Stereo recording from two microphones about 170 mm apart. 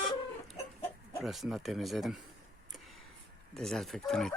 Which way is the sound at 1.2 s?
Centre (ahead or behind).